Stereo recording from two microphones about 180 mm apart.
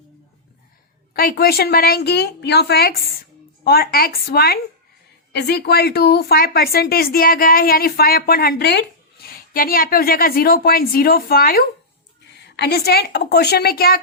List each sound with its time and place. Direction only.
1.1 s speech: 55° left (ahead or behind)